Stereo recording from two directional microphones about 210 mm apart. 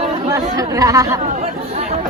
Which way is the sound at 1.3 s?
35° right (ahead or behind).